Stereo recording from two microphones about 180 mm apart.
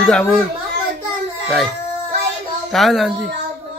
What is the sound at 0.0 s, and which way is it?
Speech, 5° left (ahead or behind).